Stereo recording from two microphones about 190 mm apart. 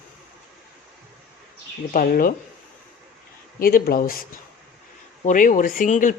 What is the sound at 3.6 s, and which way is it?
Speech, 50° left (ahead or behind).